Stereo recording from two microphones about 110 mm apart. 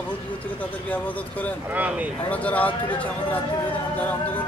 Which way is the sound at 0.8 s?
15° left (ahead or behind).